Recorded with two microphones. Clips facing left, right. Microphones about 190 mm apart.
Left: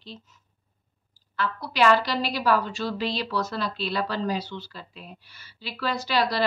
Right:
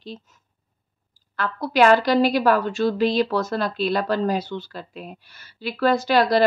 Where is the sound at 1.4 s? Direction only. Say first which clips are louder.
Right 5 dB; 50° right (ahead or behind).